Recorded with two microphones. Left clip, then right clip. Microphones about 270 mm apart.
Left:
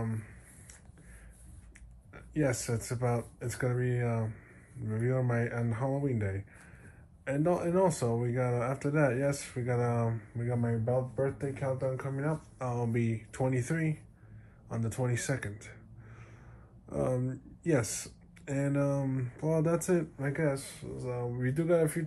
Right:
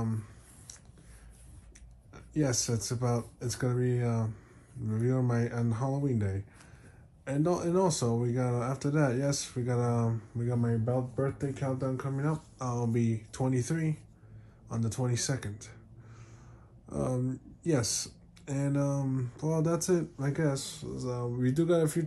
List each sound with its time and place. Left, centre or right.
0.0 s a sound: centre
2.1 s speech: centre
8.0 s speech: right
8.3 s speech: centre
12.8 s speech: centre
16.9 s speech: centre